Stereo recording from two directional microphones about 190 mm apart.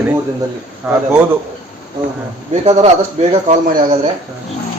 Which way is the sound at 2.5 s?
35° right (ahead or behind).